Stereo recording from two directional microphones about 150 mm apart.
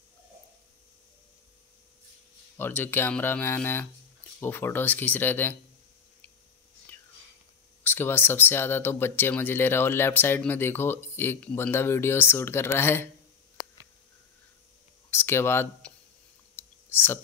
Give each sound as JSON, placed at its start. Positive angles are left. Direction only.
{"t": 2.5, "sound": "speech", "side_deg": 15}
{"t": 7.8, "sound": "speech", "side_deg": 15}
{"t": 15.0, "sound": "speech", "side_deg": 15}
{"t": 16.5, "sound": "clicking", "side_deg": 15}